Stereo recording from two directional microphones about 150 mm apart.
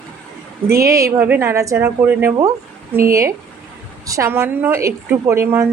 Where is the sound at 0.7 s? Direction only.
20° right (ahead or behind).